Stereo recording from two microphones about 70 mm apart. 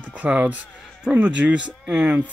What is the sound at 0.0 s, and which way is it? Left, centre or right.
Speech, centre.